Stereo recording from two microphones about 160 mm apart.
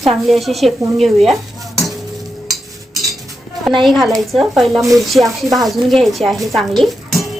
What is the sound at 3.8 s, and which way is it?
Speech, centre (ahead or behind).